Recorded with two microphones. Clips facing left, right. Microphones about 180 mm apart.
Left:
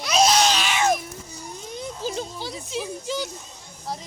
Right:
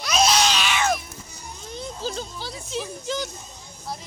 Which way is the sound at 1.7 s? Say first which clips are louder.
Even; 15° left (ahead or behind).